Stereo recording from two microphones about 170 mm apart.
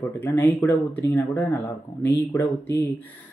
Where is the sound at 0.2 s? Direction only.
10° left (ahead or behind).